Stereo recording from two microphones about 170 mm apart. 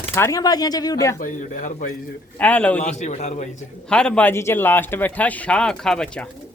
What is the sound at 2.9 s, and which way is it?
Speech, 45° left (ahead or behind).